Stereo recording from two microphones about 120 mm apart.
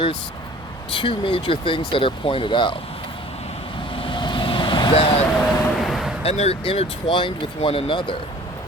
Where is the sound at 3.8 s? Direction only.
45° left (ahead or behind).